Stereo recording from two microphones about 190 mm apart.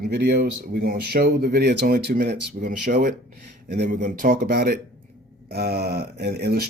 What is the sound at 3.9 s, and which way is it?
Speech, 40° right (ahead or behind).